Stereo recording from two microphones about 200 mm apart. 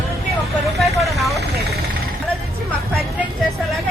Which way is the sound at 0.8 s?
Centre (ahead or behind).